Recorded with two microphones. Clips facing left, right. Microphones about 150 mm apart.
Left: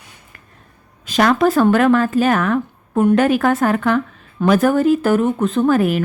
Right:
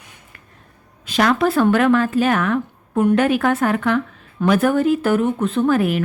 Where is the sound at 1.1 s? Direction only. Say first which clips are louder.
Left 2 dB; 40° left (ahead or behind).